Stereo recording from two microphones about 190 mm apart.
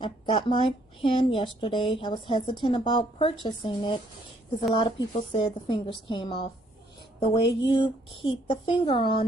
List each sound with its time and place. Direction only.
0.0 s speech: 25° left (ahead or behind)